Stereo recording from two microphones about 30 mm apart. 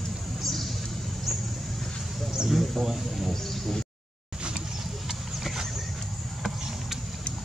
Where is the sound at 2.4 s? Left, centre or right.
Centre.